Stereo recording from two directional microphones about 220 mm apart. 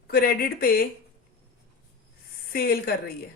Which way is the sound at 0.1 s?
40° left (ahead or behind).